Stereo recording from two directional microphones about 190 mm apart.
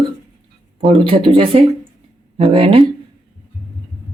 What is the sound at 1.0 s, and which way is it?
Speech, 25° right (ahead or behind).